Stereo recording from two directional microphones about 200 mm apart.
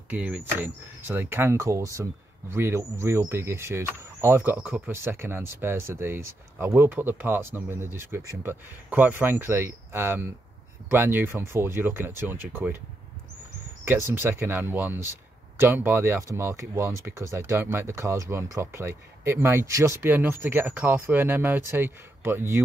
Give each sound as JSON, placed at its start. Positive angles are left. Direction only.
{"t": 0.1, "sound": "speech", "side_deg": -10}
{"t": 13.8, "sound": "speech", "side_deg": -10}